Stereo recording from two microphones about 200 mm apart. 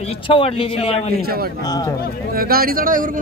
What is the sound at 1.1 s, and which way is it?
Speech, 50° right (ahead or behind).